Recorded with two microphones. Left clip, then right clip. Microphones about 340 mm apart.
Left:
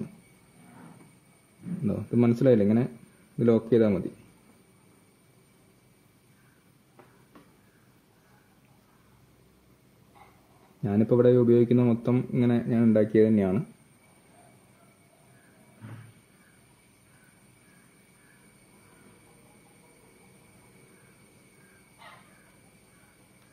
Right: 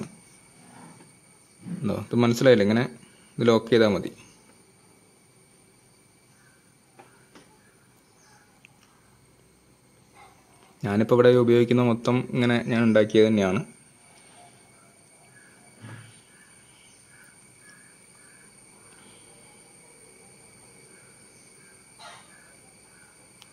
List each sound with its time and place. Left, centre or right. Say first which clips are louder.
1.9 s a man's voice: right 2 dB; right
10.8 s a sound: right 2 dB; right
11.1 s a man's voice: right 3 dB; right